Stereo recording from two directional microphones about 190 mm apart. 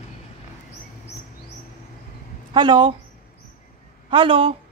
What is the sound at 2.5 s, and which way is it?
Speech, 25° right (ahead or behind).